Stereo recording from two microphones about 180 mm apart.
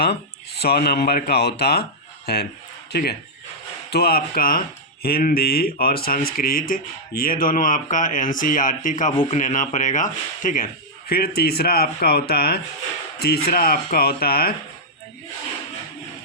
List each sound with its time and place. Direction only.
0.6 s a man's voice: 60° left (ahead or behind)
11.1 s a man's voice: 60° left (ahead or behind)